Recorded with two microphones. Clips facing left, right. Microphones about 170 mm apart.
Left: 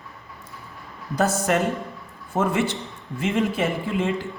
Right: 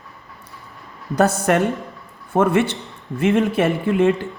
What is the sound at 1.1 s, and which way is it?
Speech, 65° right (ahead or behind).